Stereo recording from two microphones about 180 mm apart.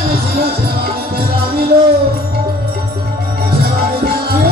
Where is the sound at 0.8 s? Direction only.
60° right (ahead or behind).